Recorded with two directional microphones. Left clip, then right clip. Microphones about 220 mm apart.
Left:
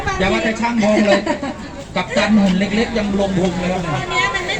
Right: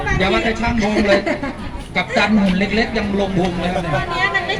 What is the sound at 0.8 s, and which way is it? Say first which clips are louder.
Speech: left 2 dB; 15° right (ahead or behind).